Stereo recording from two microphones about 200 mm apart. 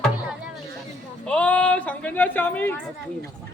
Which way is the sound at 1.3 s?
5° left (ahead or behind).